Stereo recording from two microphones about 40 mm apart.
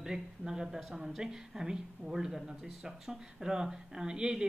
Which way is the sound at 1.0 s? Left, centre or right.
Centre.